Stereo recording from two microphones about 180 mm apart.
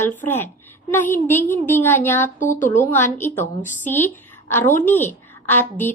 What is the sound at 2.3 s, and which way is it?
Speech, 45° left (ahead or behind).